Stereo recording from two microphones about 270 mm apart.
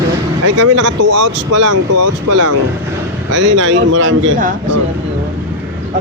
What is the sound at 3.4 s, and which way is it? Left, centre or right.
Speech, right.